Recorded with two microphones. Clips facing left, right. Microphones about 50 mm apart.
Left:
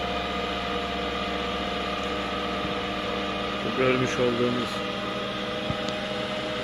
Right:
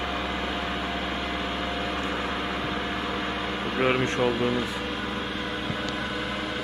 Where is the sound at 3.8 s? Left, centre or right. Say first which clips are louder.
Left 1 dB; centre.